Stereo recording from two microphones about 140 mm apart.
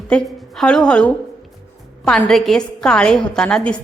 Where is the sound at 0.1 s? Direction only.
5° left (ahead or behind).